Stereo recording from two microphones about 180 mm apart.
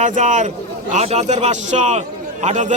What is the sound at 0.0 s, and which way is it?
A man's voice, 45° right (ahead or behind).